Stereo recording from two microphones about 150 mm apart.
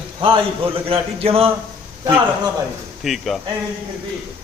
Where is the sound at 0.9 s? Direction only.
40° right (ahead or behind).